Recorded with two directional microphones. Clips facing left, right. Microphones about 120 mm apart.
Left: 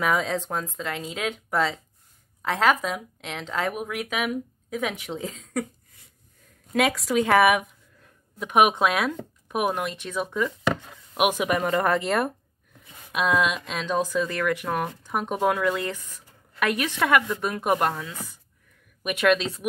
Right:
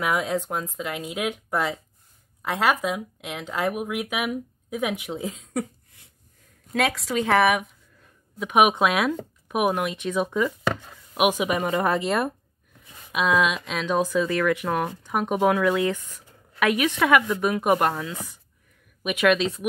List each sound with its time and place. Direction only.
0.0 s speech: 10° right (ahead or behind)
6.7 s speech: centre (ahead or behind)
19.0 s speech: 5° right (ahead or behind)